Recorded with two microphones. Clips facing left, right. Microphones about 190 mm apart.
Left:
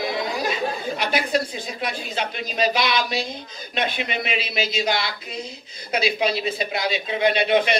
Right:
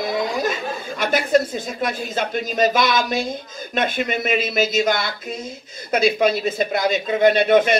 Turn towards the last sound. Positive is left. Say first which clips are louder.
# right 4 dB
turn(degrees=-50)  # may be behind; listen again after turning